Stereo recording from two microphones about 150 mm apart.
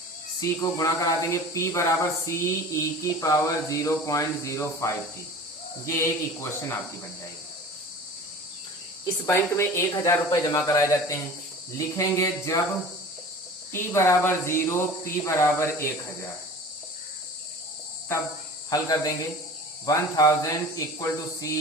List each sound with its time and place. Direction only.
0.3 s speech: 25° left (ahead or behind)
9.2 s speech: 15° left (ahead or behind)
13.7 s speech: 20° left (ahead or behind)
18.7 s speech: 20° left (ahead or behind)